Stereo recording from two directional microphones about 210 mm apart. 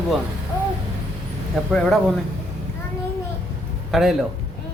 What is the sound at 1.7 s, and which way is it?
Speech, 5° left (ahead or behind).